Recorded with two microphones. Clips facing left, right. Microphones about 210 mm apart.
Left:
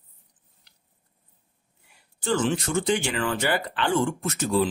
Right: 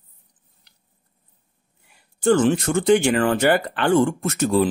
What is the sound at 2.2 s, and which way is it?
Speech, 50° right (ahead or behind).